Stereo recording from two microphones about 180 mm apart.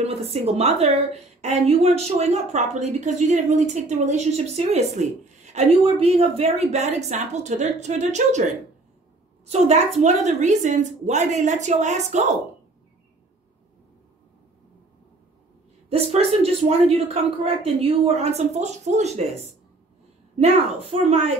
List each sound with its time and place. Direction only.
0.0 s a woman's voice: 35° right (ahead or behind)
9.5 s a woman's voice: 40° right (ahead or behind)
15.9 s a woman's voice: 35° right (ahead or behind)